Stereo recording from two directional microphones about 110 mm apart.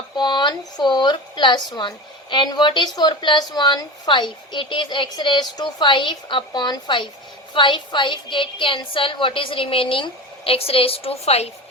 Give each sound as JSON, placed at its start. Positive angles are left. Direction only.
{"t": 0.2, "sound": "a woman's voice", "side_deg": 45}